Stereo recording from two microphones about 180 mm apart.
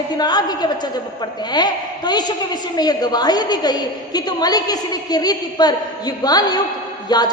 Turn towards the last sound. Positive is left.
turn(degrees=20)  # may be behind; listen again after turning